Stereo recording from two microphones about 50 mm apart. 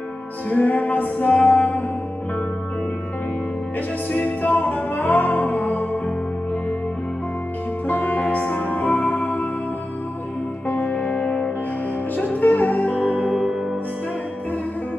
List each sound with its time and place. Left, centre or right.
0.5 s music: left
1.3 s music: left
4.1 s music: left
7.9 s music: left
10.7 s music: left
11.1 s music: centre
12.2 s music: left